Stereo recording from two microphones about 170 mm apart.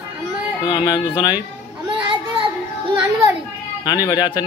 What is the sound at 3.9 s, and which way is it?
Speech, 25° left (ahead or behind).